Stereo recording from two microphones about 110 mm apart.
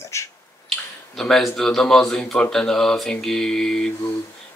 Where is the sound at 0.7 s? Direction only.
5° left (ahead or behind).